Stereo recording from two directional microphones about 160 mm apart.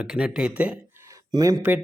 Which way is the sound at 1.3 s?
20° right (ahead or behind).